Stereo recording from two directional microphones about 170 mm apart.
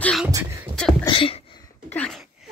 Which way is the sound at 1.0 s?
30° left (ahead or behind).